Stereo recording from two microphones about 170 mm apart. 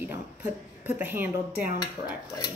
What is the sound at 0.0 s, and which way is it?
Speech, 15° right (ahead or behind).